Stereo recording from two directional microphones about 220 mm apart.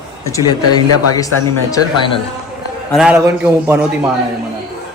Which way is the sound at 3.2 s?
15° right (ahead or behind).